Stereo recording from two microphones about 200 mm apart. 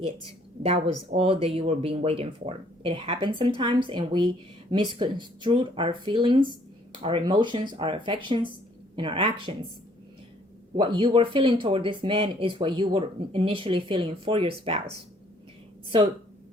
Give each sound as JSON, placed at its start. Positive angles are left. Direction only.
{"t": 0.6, "sound": "speech", "side_deg": -30}
{"t": 10.8, "sound": "speech", "side_deg": -25}